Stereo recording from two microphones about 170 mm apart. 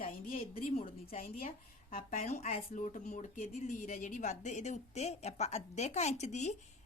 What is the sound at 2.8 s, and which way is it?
A woman's voice, 50° left (ahead or behind).